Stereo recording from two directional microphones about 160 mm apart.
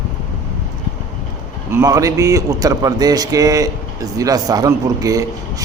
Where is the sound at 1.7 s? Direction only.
20° right (ahead or behind).